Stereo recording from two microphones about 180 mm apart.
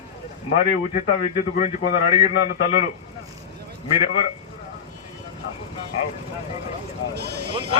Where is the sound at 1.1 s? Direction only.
35° left (ahead or behind).